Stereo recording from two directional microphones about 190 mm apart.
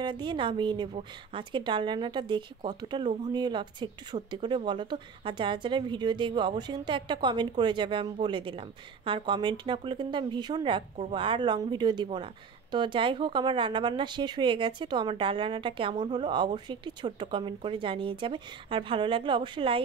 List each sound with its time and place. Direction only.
0.0 s a woman's voice: 25° right (ahead or behind)